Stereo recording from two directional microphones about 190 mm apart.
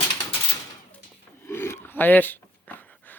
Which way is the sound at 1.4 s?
15° left (ahead or behind).